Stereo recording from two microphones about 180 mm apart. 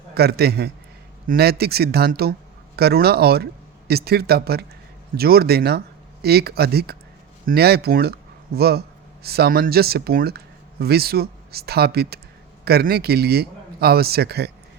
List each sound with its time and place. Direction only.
0.1 s a man's voice: 60° right (ahead or behind)